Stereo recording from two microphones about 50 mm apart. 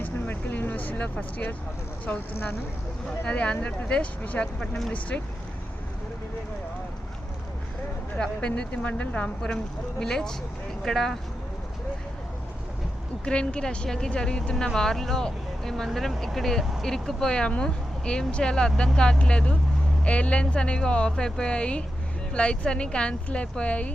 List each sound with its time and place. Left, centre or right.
0.0 s vehicle: left
2.1 s speech: left
3.2 s speech: left
8.2 s speech: left
10.0 s speech: centre
13.2 s speech: left